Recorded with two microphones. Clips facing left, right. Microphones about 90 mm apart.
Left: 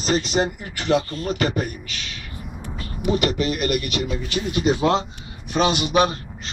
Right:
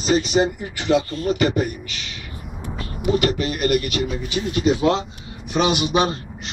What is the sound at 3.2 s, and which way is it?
Speech, 40° right (ahead or behind).